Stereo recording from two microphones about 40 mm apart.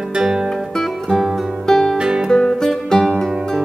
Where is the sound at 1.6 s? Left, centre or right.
Centre.